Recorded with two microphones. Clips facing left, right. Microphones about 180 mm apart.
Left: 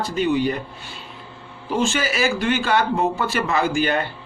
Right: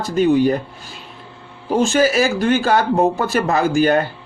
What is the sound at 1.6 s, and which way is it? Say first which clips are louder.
Speech: right 7 dB; 40° right (ahead or behind).